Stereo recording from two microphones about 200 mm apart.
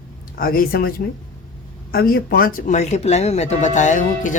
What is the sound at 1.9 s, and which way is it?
Speech, 50° left (ahead or behind).